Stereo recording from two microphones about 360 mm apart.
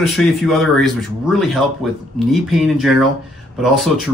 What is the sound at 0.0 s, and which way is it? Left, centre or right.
Speech, centre.